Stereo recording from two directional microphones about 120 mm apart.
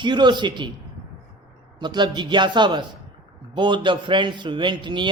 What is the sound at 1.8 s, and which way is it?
Speech, 40° right (ahead or behind).